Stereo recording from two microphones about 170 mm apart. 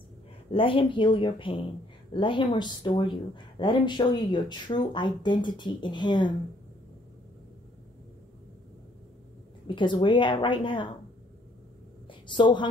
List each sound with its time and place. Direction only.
0.5 s speech: 30° left (ahead or behind)
9.8 s speech: 30° left (ahead or behind)
12.1 s a woman's voice: 30° left (ahead or behind)